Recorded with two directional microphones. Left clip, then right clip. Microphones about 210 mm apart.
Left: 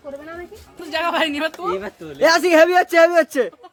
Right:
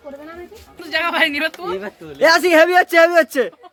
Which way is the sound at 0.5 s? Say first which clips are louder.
Right 4 dB; 40° left (ahead or behind).